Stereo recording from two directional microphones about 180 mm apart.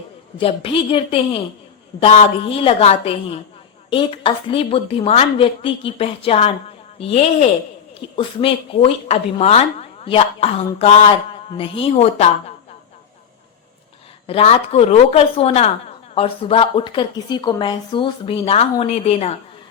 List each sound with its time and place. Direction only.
0.3 s speech: 30° left (ahead or behind)
14.3 s speech: 35° left (ahead or behind)